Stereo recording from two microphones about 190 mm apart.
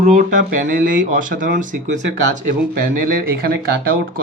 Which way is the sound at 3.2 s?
50° right (ahead or behind).